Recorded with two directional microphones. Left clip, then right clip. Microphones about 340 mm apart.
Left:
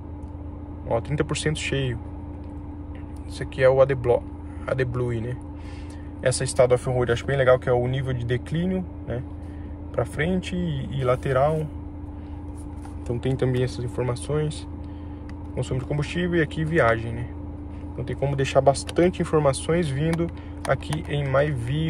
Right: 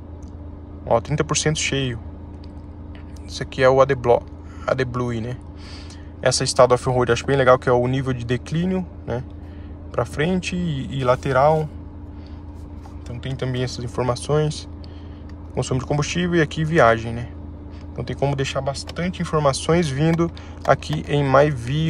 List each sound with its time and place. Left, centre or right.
0.8 s speech: centre
3.3 s speech: centre
13.2 s speech: centre
15.5 s speech: centre